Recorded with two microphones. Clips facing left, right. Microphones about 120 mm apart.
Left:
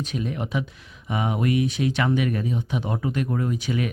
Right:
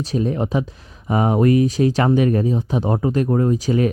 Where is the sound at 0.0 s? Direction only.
35° right (ahead or behind).